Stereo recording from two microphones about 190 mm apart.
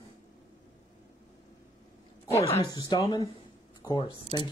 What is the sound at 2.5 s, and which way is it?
Speech, 20° left (ahead or behind).